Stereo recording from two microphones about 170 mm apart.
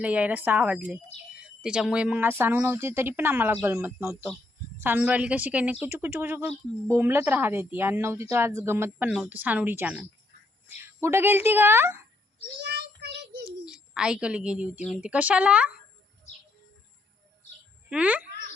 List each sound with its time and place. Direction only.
0.0 s speech: 10° right (ahead or behind)
9.0 s speech: 5° right (ahead or behind)
12.5 s child singing: 80° right
13.7 s a woman's voice: 5° right (ahead or behind)
17.8 s speech: 5° right (ahead or behind)